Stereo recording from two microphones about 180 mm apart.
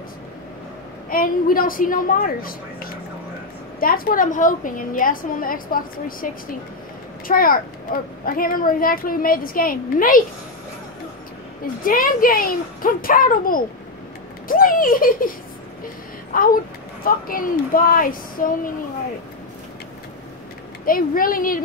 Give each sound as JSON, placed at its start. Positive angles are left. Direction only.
{"t": 1.1, "sound": "a woman's voice", "side_deg": 50}
{"t": 7.2, "sound": "a woman's voice", "side_deg": 50}
{"t": 11.6, "sound": "a woman's voice", "side_deg": 50}
{"t": 16.3, "sound": "a woman's voice", "side_deg": 50}
{"t": 20.8, "sound": "a woman's voice", "side_deg": 50}